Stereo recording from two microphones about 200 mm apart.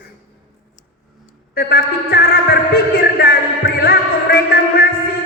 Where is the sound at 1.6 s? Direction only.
50° left (ahead or behind).